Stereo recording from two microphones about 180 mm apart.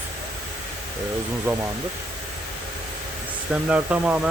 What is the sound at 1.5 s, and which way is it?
Speech, 10° right (ahead or behind).